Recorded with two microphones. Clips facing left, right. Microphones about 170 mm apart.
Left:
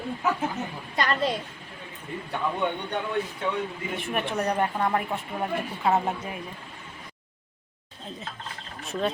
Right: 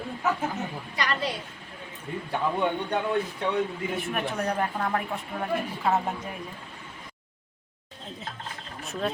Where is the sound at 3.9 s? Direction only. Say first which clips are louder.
Left 3 dB; 5° right (ahead or behind).